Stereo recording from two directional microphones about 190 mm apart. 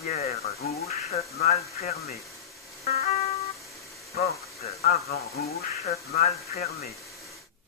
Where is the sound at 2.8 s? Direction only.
35° left (ahead or behind).